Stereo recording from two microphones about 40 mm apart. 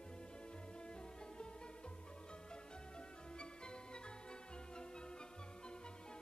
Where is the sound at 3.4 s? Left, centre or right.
Left.